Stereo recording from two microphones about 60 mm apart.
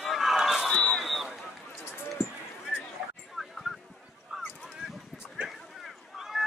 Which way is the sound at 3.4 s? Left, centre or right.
Centre.